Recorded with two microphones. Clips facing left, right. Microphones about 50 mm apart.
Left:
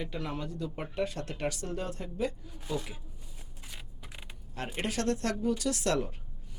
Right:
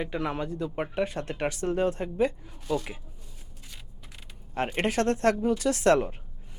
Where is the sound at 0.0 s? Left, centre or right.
Right.